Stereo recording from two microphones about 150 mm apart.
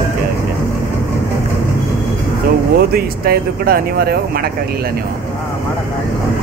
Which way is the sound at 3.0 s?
90° right.